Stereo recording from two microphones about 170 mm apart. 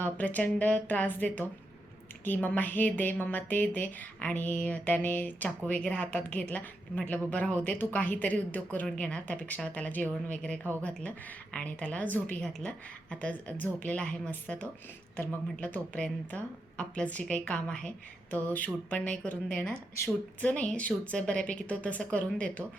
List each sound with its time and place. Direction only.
0.0 s a woman's voice: 10° left (ahead or behind)